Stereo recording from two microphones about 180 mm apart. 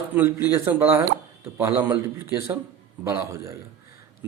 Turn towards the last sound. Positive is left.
turn(degrees=-15)  # may be behind; listen again after turning